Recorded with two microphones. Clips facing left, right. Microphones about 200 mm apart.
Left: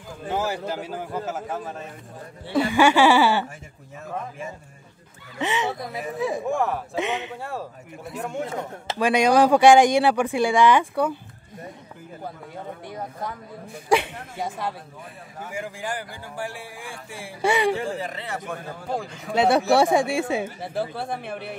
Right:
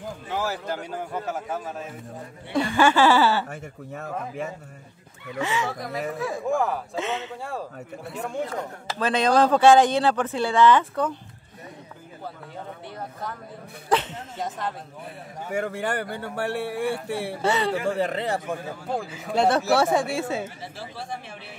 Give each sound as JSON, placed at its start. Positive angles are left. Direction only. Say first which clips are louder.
{"t": 0.3, "sound": "speech", "louder": "left 3 dB", "side_deg": 20}
{"t": 0.7, "sound": "a man's voice", "louder": "left 1 dB", "side_deg": 5}
{"t": 3.4, "sound": "speech", "louder": "right 5 dB", "side_deg": -60}
{"t": 5.4, "sound": "speech", "louder": "left 1 dB", "side_deg": 20}
{"t": 6.4, "sound": "a man's voice", "louder": "right 4 dB", "side_deg": 0}
{"t": 7.0, "sound": "speech", "louder": "left 4 dB", "side_deg": 15}
{"t": 7.4, "sound": "a man's voice", "louder": "even", "side_deg": 0}
{"t": 8.8, "sound": "speech", "louder": "left 3 dB", "side_deg": 15}
{"t": 12.9, "sound": "speech", "louder": "left 2 dB", "side_deg": 10}
{"t": 15.5, "sound": "speech", "louder": "right 5 dB", "side_deg": -65}
{"t": 17.4, "sound": "speech", "louder": "left 4 dB", "side_deg": 10}
{"t": 17.8, "sound": "speech", "louder": "right 5 dB", "side_deg": -60}
{"t": 18.9, "sound": "a man's voice", "louder": "left 1 dB", "side_deg": 0}
{"t": 20.6, "sound": "speech", "louder": "left 8 dB", "side_deg": 55}